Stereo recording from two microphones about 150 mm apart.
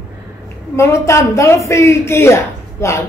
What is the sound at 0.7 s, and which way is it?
A woman's voice, 20° left (ahead or behind).